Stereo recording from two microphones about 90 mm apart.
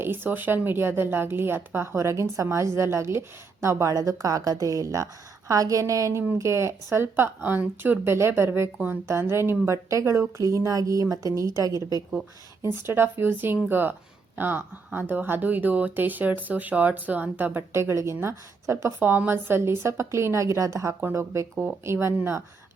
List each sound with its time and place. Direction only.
0.0 s a woman's voice: 25° right (ahead or behind); by 11.8 s 40° right (ahead or behind)
12.8 s speech: 25° right (ahead or behind)
18.9 s speech: 20° right (ahead or behind)